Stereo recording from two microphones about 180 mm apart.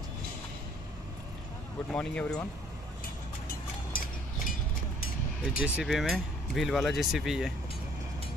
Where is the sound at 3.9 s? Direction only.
50° left (ahead or behind).